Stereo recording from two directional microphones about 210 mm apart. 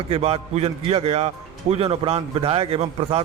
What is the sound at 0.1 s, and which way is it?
A man's voice, 30° right (ahead or behind).